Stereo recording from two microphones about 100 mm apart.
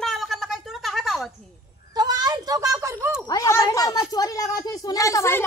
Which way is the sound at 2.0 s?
40° right (ahead or behind).